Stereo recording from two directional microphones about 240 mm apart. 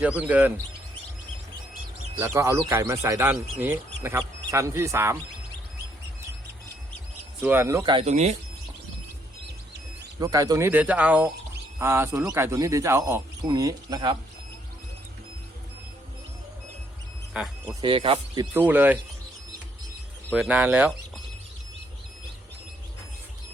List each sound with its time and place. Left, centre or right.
0.0 s speech: centre
2.1 s speech: centre
7.4 s speech: centre; by 8.4 s right
10.2 s speech: centre
17.3 s speech: centre
17.7 s speech: right
18.5 s speech: centre
20.3 s speech: centre